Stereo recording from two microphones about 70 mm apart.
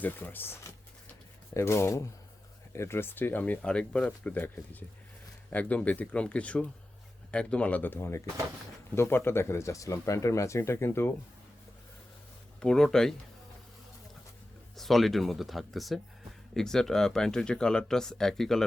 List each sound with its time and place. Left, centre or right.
0.0 s speech: left
1.5 s speech: left
3.6 s speech: centre; by 11.1 s left
12.5 s speech: centre
14.8 s speech: centre